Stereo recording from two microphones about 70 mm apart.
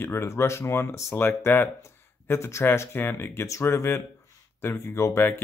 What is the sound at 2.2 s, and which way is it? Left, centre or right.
Speech, left.